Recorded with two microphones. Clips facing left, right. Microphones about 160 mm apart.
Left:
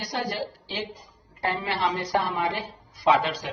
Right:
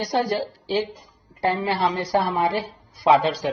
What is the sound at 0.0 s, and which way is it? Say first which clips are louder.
Speech: right 7 dB; 40° right (ahead or behind).